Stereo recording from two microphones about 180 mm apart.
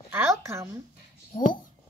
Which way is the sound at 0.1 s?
15° right (ahead or behind).